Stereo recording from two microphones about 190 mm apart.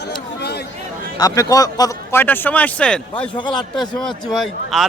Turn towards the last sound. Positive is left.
turn(degrees=0)  # may be behind; listen again after turning